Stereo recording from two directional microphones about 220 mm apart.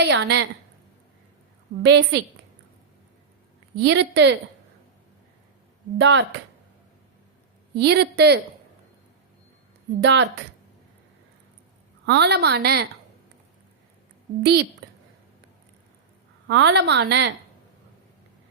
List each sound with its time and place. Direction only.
0.0 s a woman's voice: 50° right (ahead or behind)
1.8 s a woman's voice: 50° right (ahead or behind)
3.8 s a woman's voice: 50° right (ahead or behind)
6.0 s speech: 55° right (ahead or behind)
7.8 s a woman's voice: 50° right (ahead or behind)
10.0 s a woman's voice: 55° right (ahead or behind)
12.0 s a woman's voice: 50° right (ahead or behind)
14.4 s a woman's voice: 50° right (ahead or behind)
16.5 s a woman's voice: 50° right (ahead or behind)